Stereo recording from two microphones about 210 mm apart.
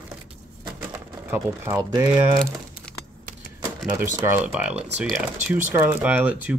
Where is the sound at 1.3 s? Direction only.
15° right (ahead or behind).